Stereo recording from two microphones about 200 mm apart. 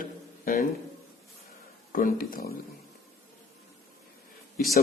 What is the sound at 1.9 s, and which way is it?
Speech, 45° left (ahead or behind).